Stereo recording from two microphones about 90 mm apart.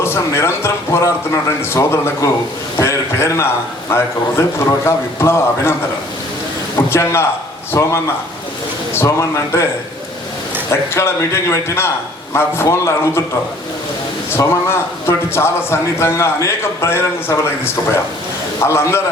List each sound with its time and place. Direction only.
0.0 s a man's voice: 30° left (ahead or behind)
6.7 s speech: 30° left (ahead or behind)
10.7 s a man's voice: 30° left (ahead or behind)
14.3 s a man's voice: 30° left (ahead or behind)
18.6 s a man's voice: 30° left (ahead or behind)